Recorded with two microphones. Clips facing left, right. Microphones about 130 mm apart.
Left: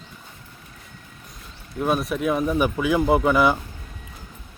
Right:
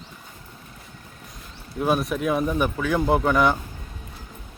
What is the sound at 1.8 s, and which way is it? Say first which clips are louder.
Speech: even; centre (ahead or behind).